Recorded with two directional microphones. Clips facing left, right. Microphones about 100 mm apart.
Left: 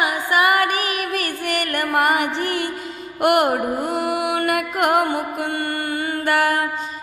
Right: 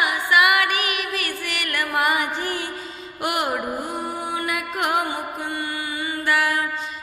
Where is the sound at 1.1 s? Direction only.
50° left (ahead or behind).